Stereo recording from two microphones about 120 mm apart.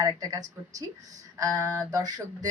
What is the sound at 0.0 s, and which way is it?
A man's voice, 35° right (ahead or behind).